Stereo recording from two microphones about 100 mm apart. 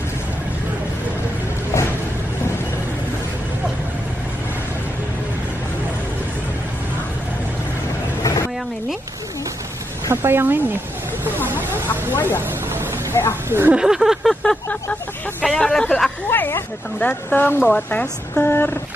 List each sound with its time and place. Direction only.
8.2 s vehicle: 35° left (ahead or behind)
10.2 s speech: 20° right (ahead or behind)
11.9 s a sound: 20° left (ahead or behind)
13.5 s speech: 25° right (ahead or behind)
13.7 s a sound: 5° right (ahead or behind)
14.4 s vehicle: 10° left (ahead or behind)
15.4 s speech: 5° left (ahead or behind)
16.3 s speech: 20° left (ahead or behind)